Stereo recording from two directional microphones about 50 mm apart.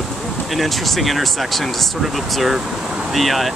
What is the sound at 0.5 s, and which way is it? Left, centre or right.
Speech, centre.